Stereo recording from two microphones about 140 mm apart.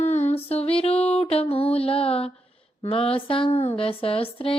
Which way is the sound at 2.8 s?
45° left (ahead or behind).